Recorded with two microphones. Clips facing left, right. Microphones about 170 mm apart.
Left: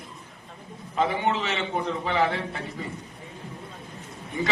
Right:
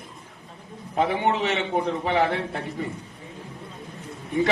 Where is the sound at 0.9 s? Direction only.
60° right (ahead or behind).